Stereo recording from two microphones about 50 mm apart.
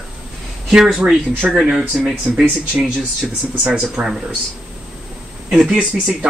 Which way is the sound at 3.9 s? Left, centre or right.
Centre.